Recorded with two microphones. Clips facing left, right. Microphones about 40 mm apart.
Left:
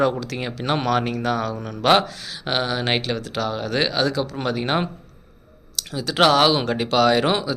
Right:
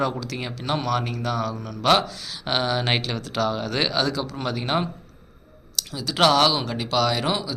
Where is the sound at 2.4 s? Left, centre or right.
Centre.